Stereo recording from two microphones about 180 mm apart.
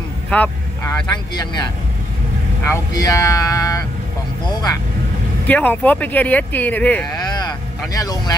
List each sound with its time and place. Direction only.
0.3 s speech: 10° left (ahead or behind)
1.1 s speech: 25° left (ahead or behind)
2.7 s speech: 20° left (ahead or behind)
5.5 s speech: 10° left (ahead or behind)
7.9 s speech: 20° left (ahead or behind)